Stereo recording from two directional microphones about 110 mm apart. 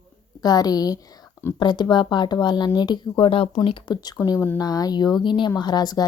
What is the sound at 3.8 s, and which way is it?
Speech, 40° left (ahead or behind).